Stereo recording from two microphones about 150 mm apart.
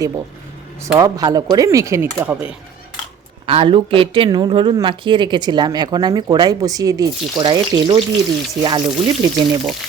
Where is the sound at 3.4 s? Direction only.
40° right (ahead or behind).